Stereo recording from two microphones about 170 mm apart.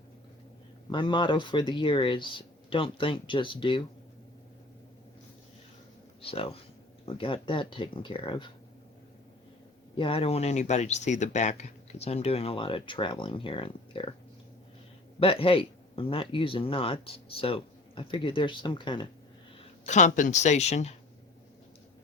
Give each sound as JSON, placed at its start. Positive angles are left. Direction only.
{"t": 0.9, "sound": "speech", "side_deg": 30}
{"t": 6.2, "sound": "speech", "side_deg": 35}
{"t": 10.0, "sound": "speech", "side_deg": 35}
{"t": 15.2, "sound": "speech", "side_deg": 30}
{"t": 19.8, "sound": "speech", "side_deg": 45}